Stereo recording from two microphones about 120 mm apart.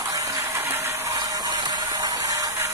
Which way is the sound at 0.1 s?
25° right (ahead or behind).